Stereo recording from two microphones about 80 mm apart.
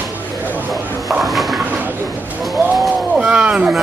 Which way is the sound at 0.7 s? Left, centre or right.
Centre.